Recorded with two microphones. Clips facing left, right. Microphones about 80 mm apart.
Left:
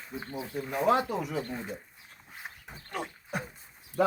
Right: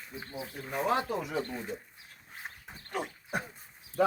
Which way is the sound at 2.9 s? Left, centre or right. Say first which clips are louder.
Right 1 dB; centre.